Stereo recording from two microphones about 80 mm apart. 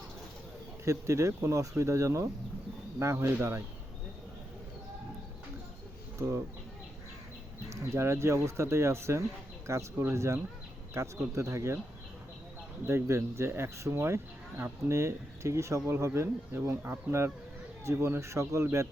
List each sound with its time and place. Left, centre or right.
0.9 s speech: right
6.1 s speech: right
7.7 s speech: right
12.9 s speech: right